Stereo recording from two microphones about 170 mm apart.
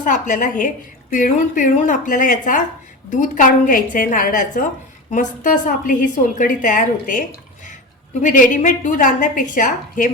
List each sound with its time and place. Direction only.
0.0 s a woman's voice: 50° left (ahead or behind)